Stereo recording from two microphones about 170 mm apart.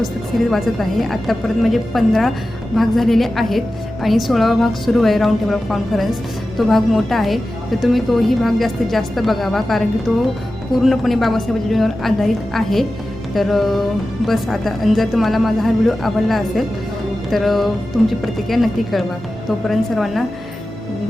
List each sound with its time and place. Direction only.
0.5 s a woman's voice: centre (ahead or behind)